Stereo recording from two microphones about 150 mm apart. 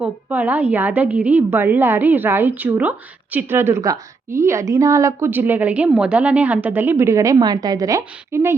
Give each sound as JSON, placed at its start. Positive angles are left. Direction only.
{"t": 0.0, "sound": "a woman's voice", "side_deg": -10}